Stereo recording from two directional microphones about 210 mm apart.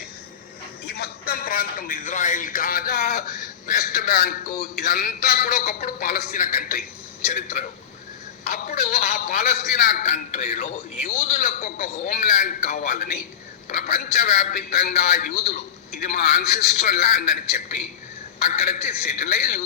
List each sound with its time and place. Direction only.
0.9 s a man's voice: 50° left (ahead or behind)